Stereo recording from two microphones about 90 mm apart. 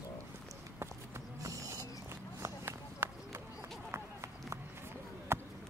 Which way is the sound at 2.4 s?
25° right (ahead or behind).